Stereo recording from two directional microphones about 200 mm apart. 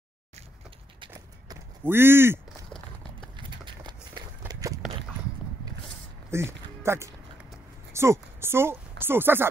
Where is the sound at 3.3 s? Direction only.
25° right (ahead or behind).